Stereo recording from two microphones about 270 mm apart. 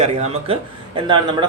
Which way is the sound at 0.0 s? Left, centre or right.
Right.